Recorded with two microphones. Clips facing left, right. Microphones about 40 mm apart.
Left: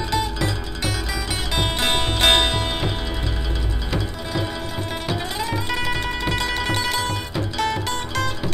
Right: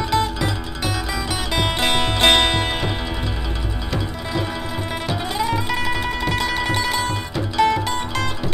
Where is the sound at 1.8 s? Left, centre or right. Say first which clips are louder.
Right 2 dB; right.